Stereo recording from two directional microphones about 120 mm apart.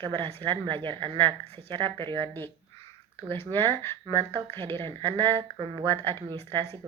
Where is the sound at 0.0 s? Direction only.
45° right (ahead or behind).